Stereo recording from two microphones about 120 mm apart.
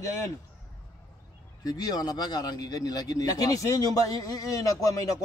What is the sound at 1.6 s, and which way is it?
A man's voice, 35° left (ahead or behind).